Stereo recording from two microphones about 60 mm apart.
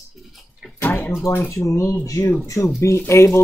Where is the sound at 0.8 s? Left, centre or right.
Left.